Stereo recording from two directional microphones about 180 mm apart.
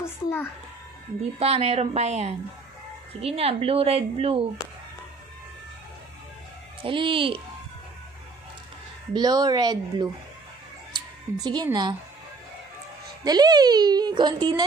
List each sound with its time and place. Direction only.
0.0 s a sound: 15° left (ahead or behind)
1.4 s a woman's voice: 35° right (ahead or behind)
6.8 s a child's voice: 30° right (ahead or behind)
9.1 s a child's voice: 20° right (ahead or behind)
11.4 s a child's voice: 20° right (ahead or behind)
13.2 s a child's voice: 20° right (ahead or behind)